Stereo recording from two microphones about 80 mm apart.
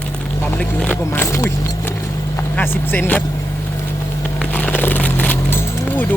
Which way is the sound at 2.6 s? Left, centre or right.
Left.